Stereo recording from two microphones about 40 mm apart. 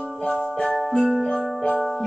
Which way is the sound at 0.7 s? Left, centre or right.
Centre.